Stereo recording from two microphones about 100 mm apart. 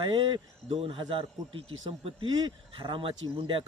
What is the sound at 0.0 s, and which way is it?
Speech, 50° right (ahead or behind).